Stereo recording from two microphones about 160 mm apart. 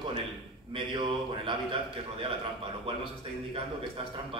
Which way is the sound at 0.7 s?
30° right (ahead or behind).